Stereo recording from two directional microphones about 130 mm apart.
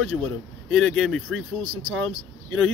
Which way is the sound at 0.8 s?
Centre (ahead or behind).